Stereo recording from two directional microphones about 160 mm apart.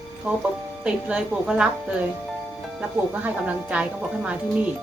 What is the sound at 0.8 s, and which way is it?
Speech, 5° right (ahead or behind).